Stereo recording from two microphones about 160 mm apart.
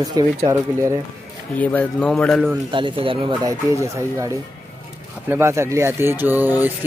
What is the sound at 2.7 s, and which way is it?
Speech, 30° right (ahead or behind).